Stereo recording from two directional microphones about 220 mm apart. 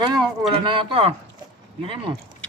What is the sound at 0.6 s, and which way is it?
Speech, 25° right (ahead or behind).